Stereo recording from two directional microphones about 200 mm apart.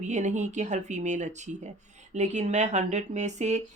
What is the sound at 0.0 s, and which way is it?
Speech, 35° right (ahead or behind).